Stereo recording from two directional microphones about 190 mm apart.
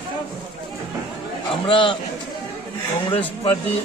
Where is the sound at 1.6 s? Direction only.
25° left (ahead or behind).